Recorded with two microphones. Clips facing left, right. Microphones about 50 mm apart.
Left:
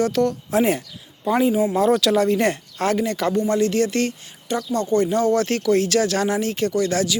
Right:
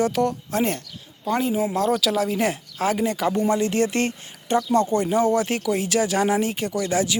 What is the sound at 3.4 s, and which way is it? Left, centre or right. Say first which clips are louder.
Speech: left 2 dB; centre.